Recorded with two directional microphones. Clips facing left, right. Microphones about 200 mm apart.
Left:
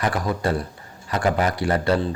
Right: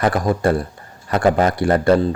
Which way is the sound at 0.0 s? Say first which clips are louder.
Right 6 dB; 50° right (ahead or behind).